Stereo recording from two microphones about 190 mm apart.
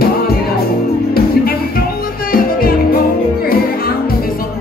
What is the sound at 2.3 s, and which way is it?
Music, 50° left (ahead or behind).